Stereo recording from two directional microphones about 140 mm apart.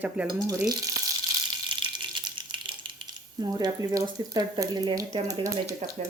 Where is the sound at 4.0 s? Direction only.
25° right (ahead or behind).